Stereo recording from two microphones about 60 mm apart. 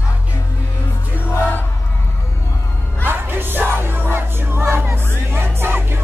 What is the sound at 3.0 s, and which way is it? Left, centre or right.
Music, right.